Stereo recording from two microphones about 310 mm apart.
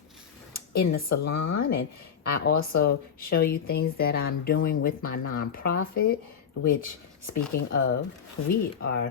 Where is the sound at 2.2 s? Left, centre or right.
Left.